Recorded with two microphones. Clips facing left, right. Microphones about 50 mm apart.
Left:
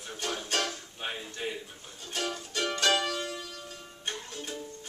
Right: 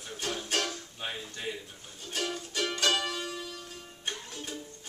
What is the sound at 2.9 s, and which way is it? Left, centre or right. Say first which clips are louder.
Music: left 2 dB; centre.